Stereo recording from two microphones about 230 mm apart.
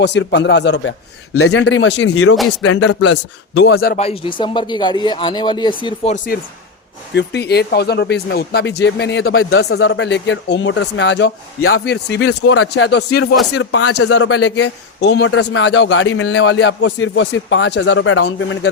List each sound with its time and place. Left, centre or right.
0.0 s a man's voice: left
1.3 s speech: left
2.6 s a man's voice: left
3.9 s a man's voice: left
7.2 s a man's voice: left
9.2 s speech: left
9.6 s a man's voice: left
11.9 s a man's voice: left
12.3 s speech: left
12.7 s a man's voice: left
13.5 s speech: left
14.1 s a man's voice: left